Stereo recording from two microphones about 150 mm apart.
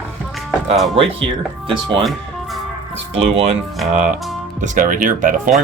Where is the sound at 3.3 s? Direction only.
40° right (ahead or behind).